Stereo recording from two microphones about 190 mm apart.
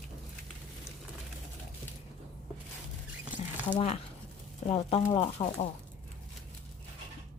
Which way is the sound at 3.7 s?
30° left (ahead or behind).